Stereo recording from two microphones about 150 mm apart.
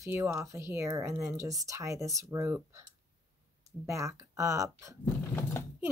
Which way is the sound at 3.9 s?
20° right (ahead or behind).